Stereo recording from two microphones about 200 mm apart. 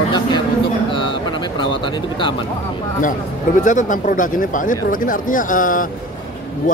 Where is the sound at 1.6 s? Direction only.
25° left (ahead or behind).